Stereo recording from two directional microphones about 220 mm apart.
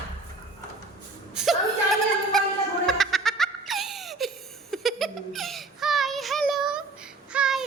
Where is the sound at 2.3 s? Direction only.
Centre (ahead or behind).